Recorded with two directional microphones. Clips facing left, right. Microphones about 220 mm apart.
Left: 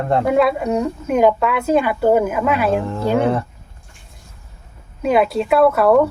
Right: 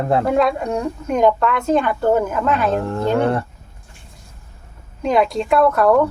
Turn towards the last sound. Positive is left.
turn(degrees=5)  # may be behind; listen again after turning